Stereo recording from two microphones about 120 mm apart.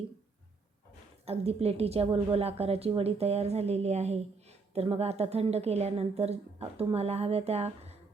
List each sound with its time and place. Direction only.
1.2 s a woman's voice: 55° right (ahead or behind)